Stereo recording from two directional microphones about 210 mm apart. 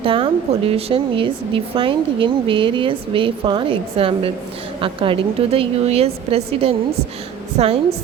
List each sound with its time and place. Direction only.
0.0 s speech: 25° right (ahead or behind)